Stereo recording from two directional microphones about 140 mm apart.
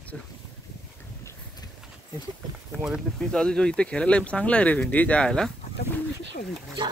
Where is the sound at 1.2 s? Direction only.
20° left (ahead or behind).